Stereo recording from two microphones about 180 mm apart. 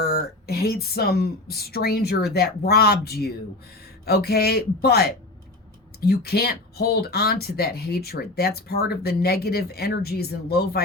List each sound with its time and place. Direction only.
0.0 s speech: 60° left (ahead or behind)